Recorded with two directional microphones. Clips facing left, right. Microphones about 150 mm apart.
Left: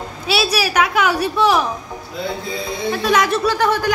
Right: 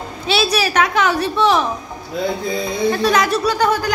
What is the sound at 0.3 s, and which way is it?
A child's voice, 5° left (ahead or behind).